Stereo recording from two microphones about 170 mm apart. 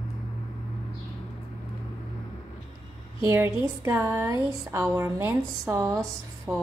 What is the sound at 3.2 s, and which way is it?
Speech, 15° right (ahead or behind).